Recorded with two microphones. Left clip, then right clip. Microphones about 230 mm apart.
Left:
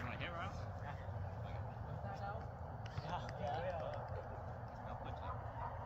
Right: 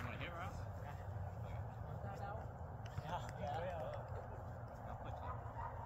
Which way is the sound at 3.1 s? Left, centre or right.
Centre.